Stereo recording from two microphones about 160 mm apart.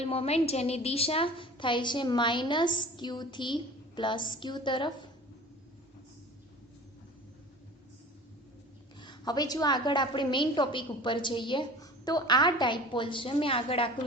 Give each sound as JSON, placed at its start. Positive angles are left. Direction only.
{"t": 0.0, "sound": "a woman's voice", "side_deg": 40}
{"t": 9.0, "sound": "a woman's voice", "side_deg": 25}